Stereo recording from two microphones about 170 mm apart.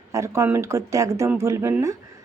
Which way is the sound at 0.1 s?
15° right (ahead or behind).